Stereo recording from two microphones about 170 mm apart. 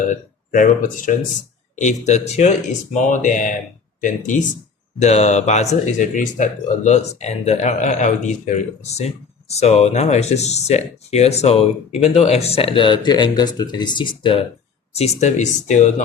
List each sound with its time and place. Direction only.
0.1 s speech: 50° left (ahead or behind)